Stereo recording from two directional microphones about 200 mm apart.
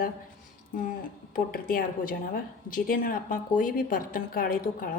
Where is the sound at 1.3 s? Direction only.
45° left (ahead or behind).